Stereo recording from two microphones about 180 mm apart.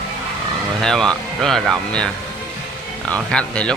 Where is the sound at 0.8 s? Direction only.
5° left (ahead or behind).